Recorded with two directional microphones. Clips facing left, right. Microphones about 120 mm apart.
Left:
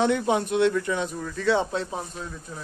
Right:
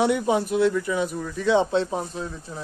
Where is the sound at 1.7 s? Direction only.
30° right (ahead or behind).